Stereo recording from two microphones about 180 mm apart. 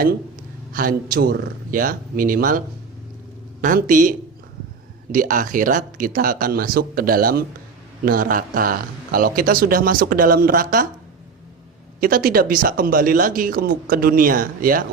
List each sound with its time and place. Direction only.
0.7 s speech: 50° right (ahead or behind)
5.1 s speech: 50° right (ahead or behind)
11.9 s speech: 55° right (ahead or behind)